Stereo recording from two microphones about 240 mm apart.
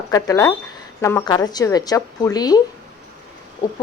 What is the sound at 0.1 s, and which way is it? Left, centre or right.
A woman's voice, centre.